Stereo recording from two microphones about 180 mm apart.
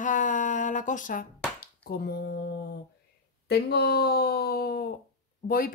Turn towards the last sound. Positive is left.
turn(degrees=55)  # may be behind; listen again after turning